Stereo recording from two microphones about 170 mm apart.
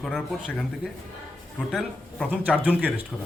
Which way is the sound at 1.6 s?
Centre (ahead or behind).